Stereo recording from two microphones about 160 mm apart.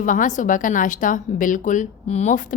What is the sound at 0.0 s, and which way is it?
A woman's voice, 55° left (ahead or behind).